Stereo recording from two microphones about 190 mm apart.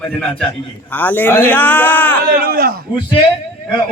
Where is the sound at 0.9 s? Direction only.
10° left (ahead or behind).